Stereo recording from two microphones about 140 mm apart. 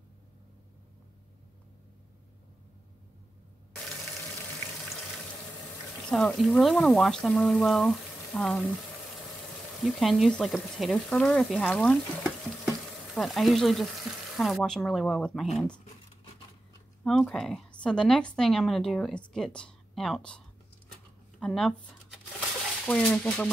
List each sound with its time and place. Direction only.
6.0 s speech: centre (ahead or behind)
9.8 s speech: centre (ahead or behind)
12.2 s stir: centre (ahead or behind)
14.3 s speech: centre (ahead or behind)
17.0 s speech: 5° left (ahead or behind)
22.8 s speech: 10° left (ahead or behind)